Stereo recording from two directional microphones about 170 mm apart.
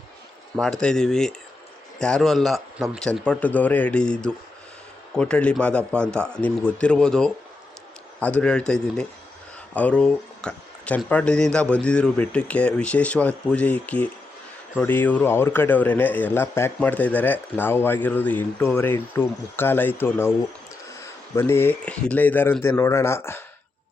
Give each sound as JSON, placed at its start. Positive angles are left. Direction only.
{"t": 0.5, "sound": "a man's voice", "side_deg": 5}